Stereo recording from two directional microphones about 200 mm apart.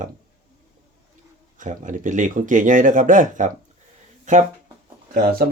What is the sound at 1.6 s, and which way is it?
Speech, 40° right (ahead or behind).